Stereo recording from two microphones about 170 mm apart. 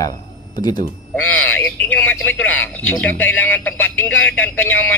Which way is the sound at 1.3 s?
10° left (ahead or behind).